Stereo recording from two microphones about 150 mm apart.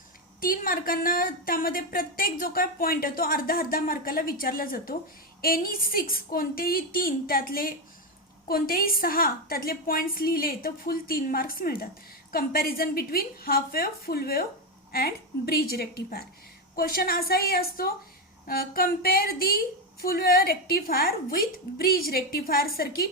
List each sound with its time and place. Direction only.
0.3 s speech: 70° left (ahead or behind)
12.3 s a woman's voice: 85° left